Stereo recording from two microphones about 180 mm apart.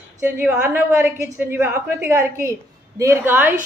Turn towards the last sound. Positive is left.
turn(degrees=-10)  # may be behind; listen again after turning